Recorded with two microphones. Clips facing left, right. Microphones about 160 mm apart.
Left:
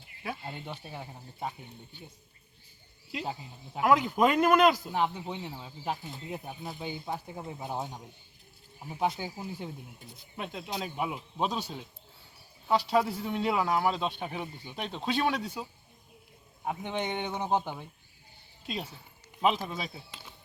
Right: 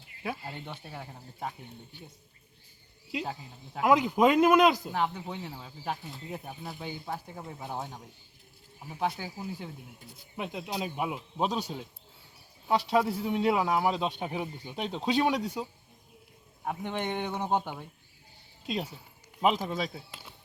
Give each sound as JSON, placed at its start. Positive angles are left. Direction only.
{"t": 0.3, "sound": "speech", "side_deg": -5}
{"t": 0.5, "sound": "speech", "side_deg": 10}
{"t": 3.8, "sound": "speech", "side_deg": -15}
{"t": 4.9, "sound": "speech", "side_deg": 15}
{"t": 10.1, "sound": "speech", "side_deg": -10}
{"t": 13.1, "sound": "speech", "side_deg": -10}
{"t": 15.0, "sound": "speech", "side_deg": -15}
{"t": 16.6, "sound": "speech", "side_deg": 0}
{"t": 19.4, "sound": "speech", "side_deg": -10}
{"t": 19.7, "sound": "speech", "side_deg": 5}